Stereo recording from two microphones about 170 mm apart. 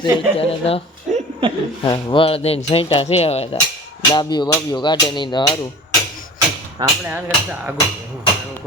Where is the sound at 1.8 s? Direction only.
30° left (ahead or behind).